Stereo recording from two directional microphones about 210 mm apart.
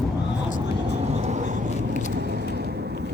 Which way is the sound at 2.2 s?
45° right (ahead or behind).